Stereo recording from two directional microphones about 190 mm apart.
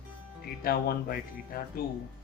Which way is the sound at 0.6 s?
55° left (ahead or behind).